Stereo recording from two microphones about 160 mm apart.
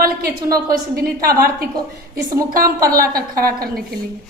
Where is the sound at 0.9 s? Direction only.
70° right (ahead or behind).